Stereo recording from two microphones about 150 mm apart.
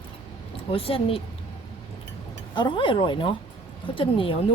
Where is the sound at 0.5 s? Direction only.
40° left (ahead or behind).